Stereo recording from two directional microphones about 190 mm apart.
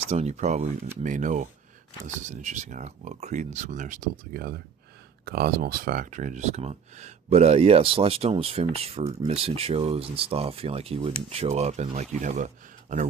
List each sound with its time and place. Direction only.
0.1 s speech: 35° right (ahead or behind)